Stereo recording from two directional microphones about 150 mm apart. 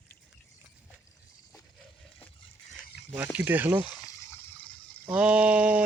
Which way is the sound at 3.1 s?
10° right (ahead or behind).